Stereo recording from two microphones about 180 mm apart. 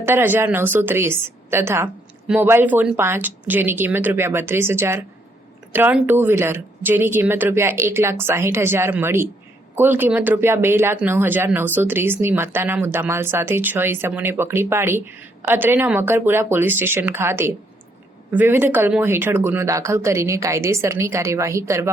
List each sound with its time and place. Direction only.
0.0 s speech: 10° right (ahead or behind)